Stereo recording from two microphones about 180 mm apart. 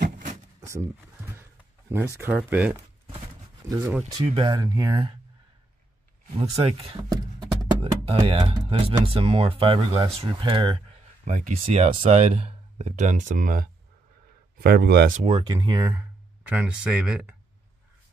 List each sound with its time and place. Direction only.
0.6 s a sound: 15° right (ahead or behind)
2.1 s speech: 10° right (ahead or behind)
6.6 s speech: 35° right (ahead or behind)
14.6 s speech: 60° right (ahead or behind)
15.1 s speech: 30° right (ahead or behind)
15.5 s speech: 20° right (ahead or behind)
16.4 s speech: 5° right (ahead or behind)